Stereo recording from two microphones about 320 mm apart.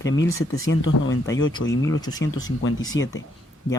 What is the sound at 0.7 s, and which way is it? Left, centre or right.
Speech, left.